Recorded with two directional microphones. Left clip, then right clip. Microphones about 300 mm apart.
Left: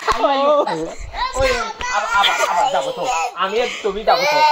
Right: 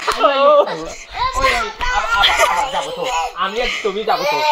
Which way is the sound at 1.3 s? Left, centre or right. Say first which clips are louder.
Right 1 dB; centre.